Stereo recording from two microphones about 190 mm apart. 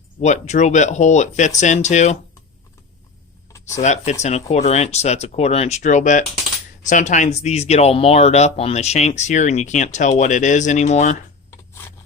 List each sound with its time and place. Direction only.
0.2 s speech: 35° left (ahead or behind)
3.8 s speech: 35° left (ahead or behind)
11.5 s a sound: 15° left (ahead or behind)